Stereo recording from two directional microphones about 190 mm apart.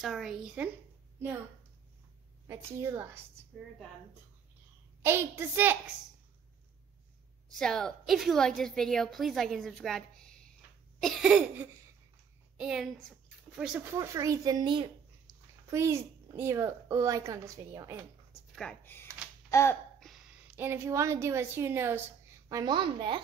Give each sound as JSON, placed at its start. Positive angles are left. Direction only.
{"t": 0.0, "sound": "a woman's voice", "side_deg": 0}
{"t": 2.4, "sound": "a woman's voice", "side_deg": -15}
{"t": 5.0, "sound": "a woman's voice", "side_deg": -10}
{"t": 7.5, "sound": "a woman's voice", "side_deg": 0}
{"t": 18.5, "sound": "speech", "side_deg": 5}
{"t": 19.5, "sound": "a sound", "side_deg": 15}
{"t": 20.0, "sound": "a sound", "side_deg": 0}
{"t": 20.5, "sound": "a woman's voice", "side_deg": -10}